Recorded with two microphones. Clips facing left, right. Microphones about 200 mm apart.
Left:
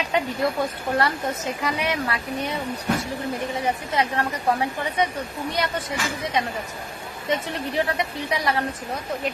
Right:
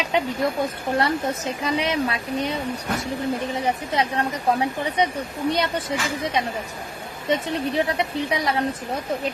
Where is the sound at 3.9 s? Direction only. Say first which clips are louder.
Right 1 dB; 20° right (ahead or behind).